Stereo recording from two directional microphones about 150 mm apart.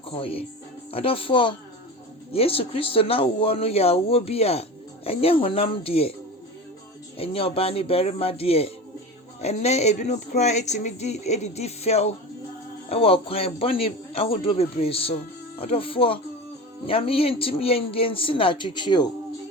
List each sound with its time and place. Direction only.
0.2 s speech: 40° left (ahead or behind)
7.2 s speech: 40° left (ahead or behind)